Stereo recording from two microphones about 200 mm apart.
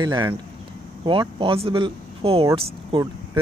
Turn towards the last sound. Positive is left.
turn(degrees=-15)  # may be behind; listen again after turning